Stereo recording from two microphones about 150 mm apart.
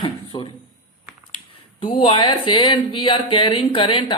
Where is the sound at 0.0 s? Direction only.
35° left (ahead or behind).